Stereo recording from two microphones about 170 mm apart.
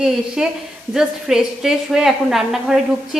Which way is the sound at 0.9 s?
5° right (ahead or behind).